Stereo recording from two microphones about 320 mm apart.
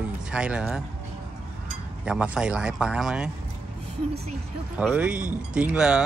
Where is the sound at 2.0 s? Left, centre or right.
Centre.